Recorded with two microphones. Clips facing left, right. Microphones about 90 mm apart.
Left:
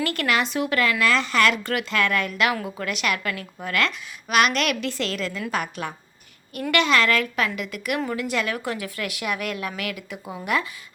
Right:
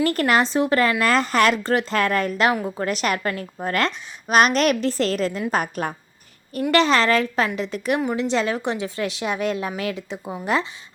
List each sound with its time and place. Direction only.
0.0 s a woman's voice: 35° right (ahead or behind)